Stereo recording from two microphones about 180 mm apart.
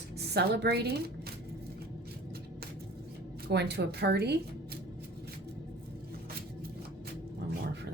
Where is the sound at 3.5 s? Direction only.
65° right (ahead or behind).